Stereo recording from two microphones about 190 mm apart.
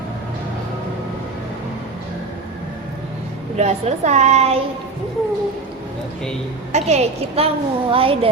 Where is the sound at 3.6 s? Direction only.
35° right (ahead or behind).